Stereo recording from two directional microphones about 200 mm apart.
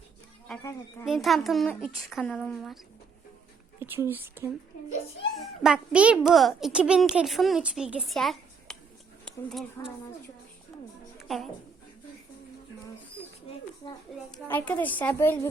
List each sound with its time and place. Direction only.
1.0 s a child's voice: centre (ahead or behind)
3.8 s a sound: 10° right (ahead or behind)
4.1 s a child's voice: 10° right (ahead or behind)
11.2 s music: centre (ahead or behind)
13.8 s a woman's voice: 20° left (ahead or behind)
14.3 s a woman's voice: 5° left (ahead or behind)